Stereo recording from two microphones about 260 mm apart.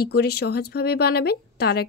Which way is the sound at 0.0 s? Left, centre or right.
Left.